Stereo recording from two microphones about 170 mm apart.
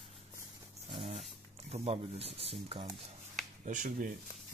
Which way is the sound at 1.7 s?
35° right (ahead or behind).